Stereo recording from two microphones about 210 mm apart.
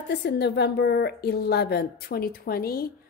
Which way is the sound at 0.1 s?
55° left (ahead or behind).